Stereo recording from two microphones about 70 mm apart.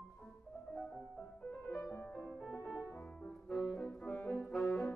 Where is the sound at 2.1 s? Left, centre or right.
Centre.